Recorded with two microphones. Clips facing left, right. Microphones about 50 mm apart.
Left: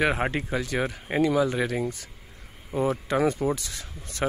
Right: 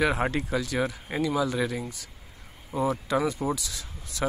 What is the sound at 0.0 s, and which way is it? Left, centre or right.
Speech, left.